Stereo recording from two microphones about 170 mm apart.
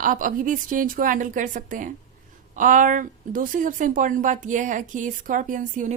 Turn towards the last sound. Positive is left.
turn(degrees=-50)  # may be behind; listen again after turning